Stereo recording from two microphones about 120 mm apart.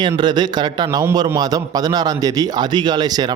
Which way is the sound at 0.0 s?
40° right (ahead or behind).